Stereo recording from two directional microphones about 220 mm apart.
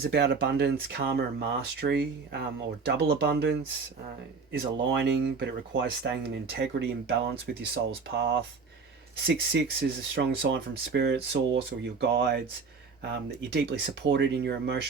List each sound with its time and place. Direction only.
0.0 s speech: 50° right (ahead or behind)
4.9 s speech: 50° right (ahead or behind)